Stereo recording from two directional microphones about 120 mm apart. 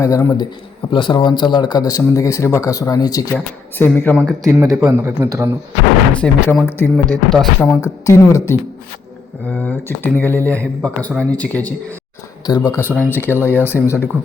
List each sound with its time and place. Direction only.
0.0 s speech: 30° left (ahead or behind)
0.9 s speech: 40° left (ahead or behind)
3.8 s speech: 15° left (ahead or behind)
4.1 s speech: centre (ahead or behind)
4.5 s a man's voice: 20° right (ahead or behind)
6.1 s speech: 5° left (ahead or behind)
6.7 s speech: 15° left (ahead or behind)
6.9 s speech: 5° left (ahead or behind)
7.8 s speech: 25° left (ahead or behind)
9.6 s speech: 15° left (ahead or behind)
12.5 s speech: 30° left (ahead or behind)
12.9 s speech: 15° left (ahead or behind)